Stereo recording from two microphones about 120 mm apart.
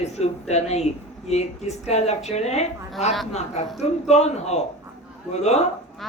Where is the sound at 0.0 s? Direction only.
65° left (ahead or behind).